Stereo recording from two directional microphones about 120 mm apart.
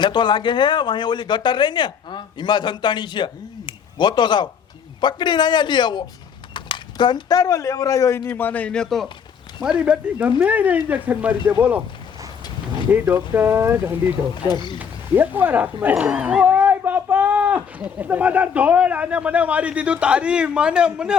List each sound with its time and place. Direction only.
0.0 s speech: 40° left (ahead or behind)
3.7 s a sound: 40° left (ahead or behind)
4.9 s speech: 40° left (ahead or behind)
8.3 s speech: 15° left (ahead or behind); by 11.8 s 15° right (ahead or behind)
12.9 s speech: 15° right (ahead or behind)
14.4 s speech: 40° left (ahead or behind)
14.8 s speech: 15° right (ahead or behind)